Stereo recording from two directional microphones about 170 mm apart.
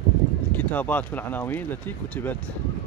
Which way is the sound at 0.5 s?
10° left (ahead or behind).